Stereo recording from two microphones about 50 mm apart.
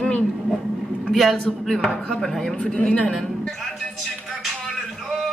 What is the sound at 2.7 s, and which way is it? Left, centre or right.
Speech, left.